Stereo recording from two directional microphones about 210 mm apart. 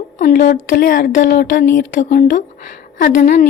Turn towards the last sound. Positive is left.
turn(degrees=50)  # may be behind; listen again after turning